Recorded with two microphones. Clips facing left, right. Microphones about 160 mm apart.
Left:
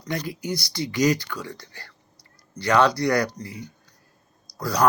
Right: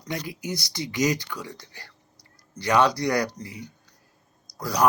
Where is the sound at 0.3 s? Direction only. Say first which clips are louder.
Left 3 dB; 20° right (ahead or behind).